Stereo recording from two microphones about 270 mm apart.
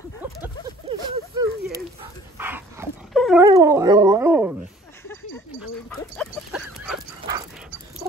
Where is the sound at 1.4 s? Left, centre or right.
Centre.